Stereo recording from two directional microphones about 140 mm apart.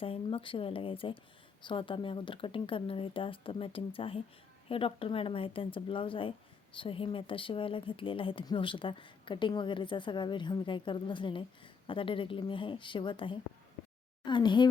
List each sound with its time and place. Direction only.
0.0 s speech: 40° left (ahead or behind)